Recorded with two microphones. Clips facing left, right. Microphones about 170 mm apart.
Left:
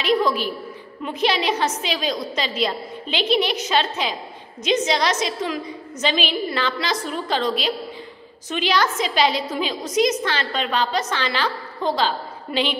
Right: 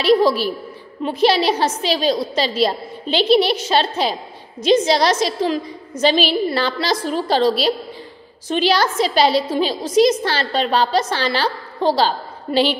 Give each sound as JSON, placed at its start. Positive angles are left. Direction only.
{"t": 0.0, "sound": "a woman's voice", "side_deg": -30}